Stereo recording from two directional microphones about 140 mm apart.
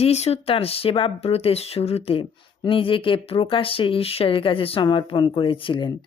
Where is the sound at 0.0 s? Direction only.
50° left (ahead or behind).